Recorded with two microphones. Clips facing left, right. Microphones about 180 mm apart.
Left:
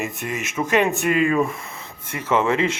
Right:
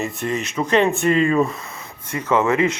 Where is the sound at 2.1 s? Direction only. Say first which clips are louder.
Right 2 dB; 25° left (ahead or behind).